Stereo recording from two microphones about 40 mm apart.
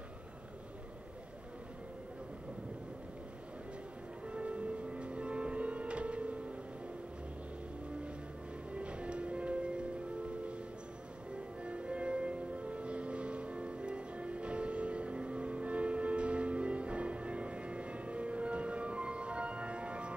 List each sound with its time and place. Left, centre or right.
4.3 s music: right
8.7 s music: right
11.6 s music: right